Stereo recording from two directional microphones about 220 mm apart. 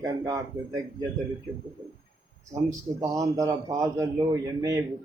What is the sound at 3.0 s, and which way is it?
A man's voice, 15° right (ahead or behind).